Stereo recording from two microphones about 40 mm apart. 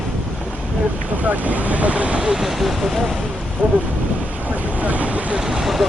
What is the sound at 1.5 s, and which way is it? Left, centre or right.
Speech, right.